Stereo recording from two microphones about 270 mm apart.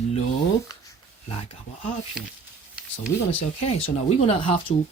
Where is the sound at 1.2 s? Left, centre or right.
Left.